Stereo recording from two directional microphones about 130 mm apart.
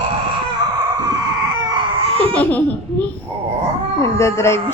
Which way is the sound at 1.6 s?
30° right (ahead or behind).